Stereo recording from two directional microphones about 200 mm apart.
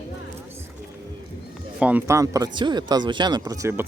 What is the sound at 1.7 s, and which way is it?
Speech, 5° right (ahead or behind).